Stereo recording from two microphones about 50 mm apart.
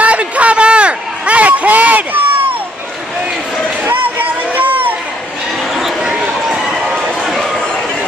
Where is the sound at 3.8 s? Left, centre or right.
Right.